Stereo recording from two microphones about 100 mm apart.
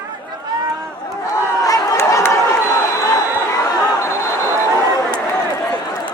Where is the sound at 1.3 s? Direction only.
35° left (ahead or behind).